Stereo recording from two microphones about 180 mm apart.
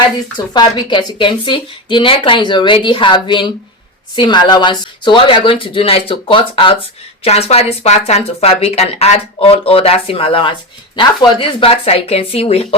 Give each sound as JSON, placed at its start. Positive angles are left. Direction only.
{"t": 0.3, "sound": "speech", "side_deg": 25}